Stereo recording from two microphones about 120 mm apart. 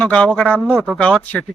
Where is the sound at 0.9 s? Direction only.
10° left (ahead or behind).